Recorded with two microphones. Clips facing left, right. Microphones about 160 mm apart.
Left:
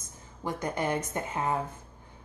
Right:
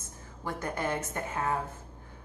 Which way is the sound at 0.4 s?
15° left (ahead or behind).